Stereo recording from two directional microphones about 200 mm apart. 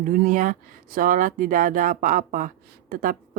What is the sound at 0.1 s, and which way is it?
A woman's voice, 40° right (ahead or behind).